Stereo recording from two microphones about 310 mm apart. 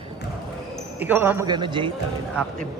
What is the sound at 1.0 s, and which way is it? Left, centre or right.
Speech, centre.